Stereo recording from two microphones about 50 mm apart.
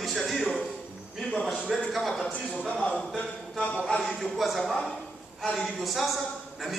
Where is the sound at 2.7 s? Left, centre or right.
Left.